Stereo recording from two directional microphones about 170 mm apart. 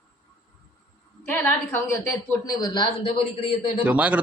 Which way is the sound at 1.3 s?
15° left (ahead or behind).